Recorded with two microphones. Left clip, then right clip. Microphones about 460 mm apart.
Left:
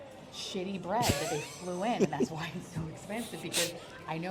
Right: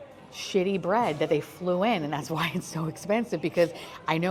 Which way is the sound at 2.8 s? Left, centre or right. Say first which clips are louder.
Right 13 dB; right.